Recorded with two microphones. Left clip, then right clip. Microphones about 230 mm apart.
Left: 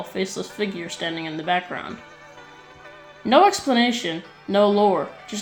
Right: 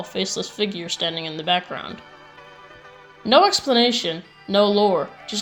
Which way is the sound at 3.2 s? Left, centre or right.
Right.